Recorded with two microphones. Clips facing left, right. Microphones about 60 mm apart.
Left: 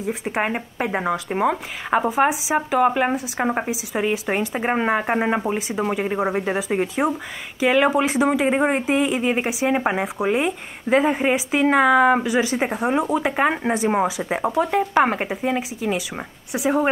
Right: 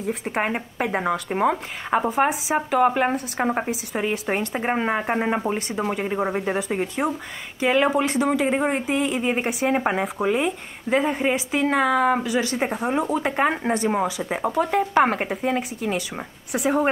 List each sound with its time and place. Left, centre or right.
0.0 s a woman's voice: centre; by 9.2 s left
9.2 s a woman's voice: centre
11.0 s a woman's voice: centre
14.7 s speech: centre